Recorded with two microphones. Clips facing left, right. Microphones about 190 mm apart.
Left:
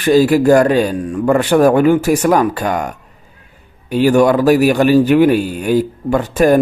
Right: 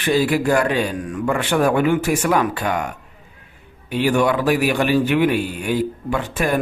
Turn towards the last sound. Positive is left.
turn(degrees=40)  # may be behind; listen again after turning